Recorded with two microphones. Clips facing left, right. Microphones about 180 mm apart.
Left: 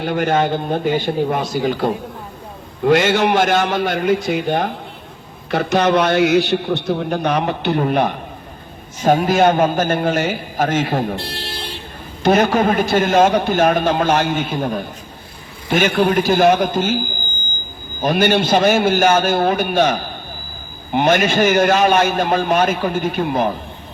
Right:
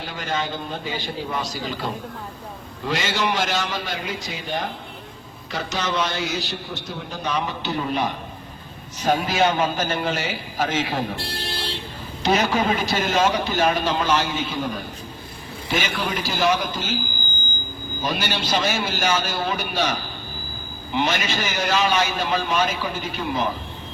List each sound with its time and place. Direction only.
0.0 s a man's voice: 55° left (ahead or behind)
12.2 s a man's voice: 55° left (ahead or behind)